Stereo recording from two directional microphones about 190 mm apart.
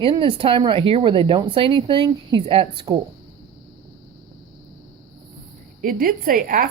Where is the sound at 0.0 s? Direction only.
25° right (ahead or behind).